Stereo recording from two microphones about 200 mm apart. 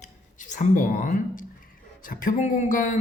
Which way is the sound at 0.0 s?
40° left (ahead or behind).